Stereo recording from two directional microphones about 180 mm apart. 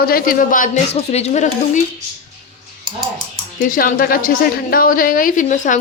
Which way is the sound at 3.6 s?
50° left (ahead or behind).